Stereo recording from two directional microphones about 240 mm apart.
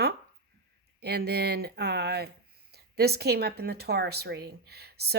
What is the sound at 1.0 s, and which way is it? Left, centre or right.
Speech, right.